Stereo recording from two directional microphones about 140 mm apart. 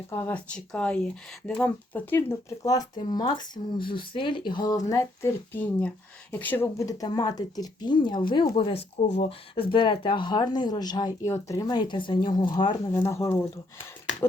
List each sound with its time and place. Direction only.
0.1 s speech: 15° left (ahead or behind)
4.9 s speech: 20° left (ahead or behind)
12.9 s speech: 20° left (ahead or behind)